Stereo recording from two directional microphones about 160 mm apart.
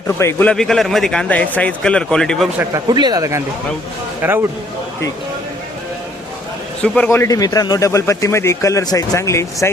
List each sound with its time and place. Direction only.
0.2 s a man's voice: 15° left (ahead or behind)
2.9 s a man's voice: 25° right (ahead or behind)
6.8 s speech: 5° left (ahead or behind)